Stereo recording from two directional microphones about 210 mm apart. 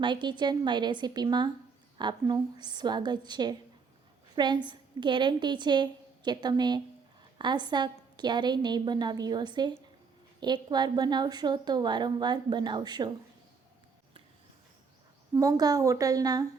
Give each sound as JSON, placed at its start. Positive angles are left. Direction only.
{"t": 0.0, "sound": "a woman's voice", "side_deg": -20}
{"t": 15.3, "sound": "a woman's voice", "side_deg": -15}